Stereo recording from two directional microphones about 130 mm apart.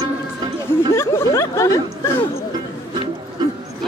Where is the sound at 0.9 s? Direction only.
20° left (ahead or behind).